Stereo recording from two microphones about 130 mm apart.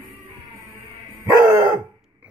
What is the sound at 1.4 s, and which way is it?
Dog, 20° right (ahead or behind).